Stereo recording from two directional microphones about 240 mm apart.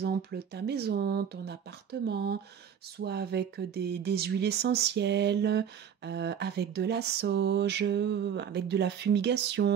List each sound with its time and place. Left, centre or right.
0.0 s speech: right